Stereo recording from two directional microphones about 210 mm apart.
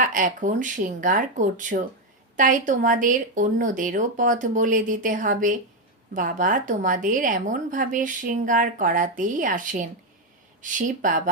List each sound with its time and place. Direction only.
0.0 s a woman's voice: 40° right (ahead or behind)